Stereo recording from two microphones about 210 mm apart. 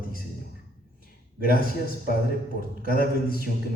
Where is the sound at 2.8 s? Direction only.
45° left (ahead or behind).